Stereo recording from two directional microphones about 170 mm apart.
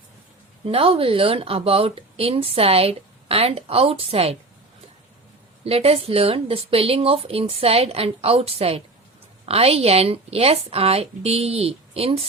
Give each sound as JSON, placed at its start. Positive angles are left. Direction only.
{"t": 0.6, "sound": "a woman's voice", "side_deg": -35}
{"t": 5.6, "sound": "a woman's voice", "side_deg": -35}